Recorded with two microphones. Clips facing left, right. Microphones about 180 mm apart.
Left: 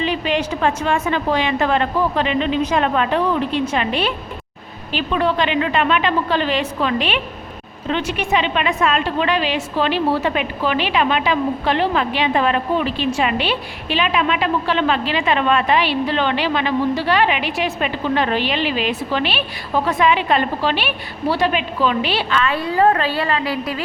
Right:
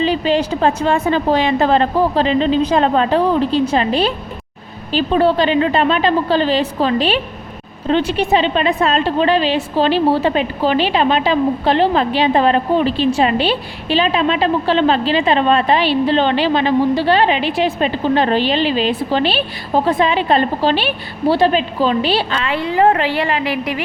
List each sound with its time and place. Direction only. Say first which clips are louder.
0.0 s a woman's voice: right 4 dB; 35° right (ahead or behind)